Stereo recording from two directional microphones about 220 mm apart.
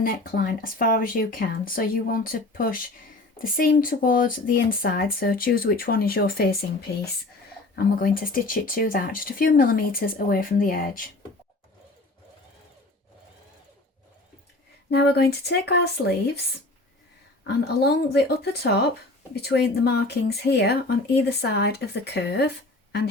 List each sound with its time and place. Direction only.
0.0 s speech: 40° left (ahead or behind)
7.8 s speech: 40° left (ahead or behind)
14.8 s speech: 50° left (ahead or behind)
17.4 s speech: 45° left (ahead or behind)